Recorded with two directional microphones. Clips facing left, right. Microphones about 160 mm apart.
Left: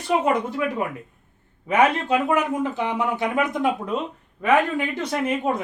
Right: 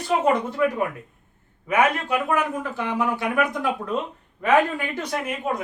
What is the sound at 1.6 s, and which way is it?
Speech, 25° left (ahead or behind).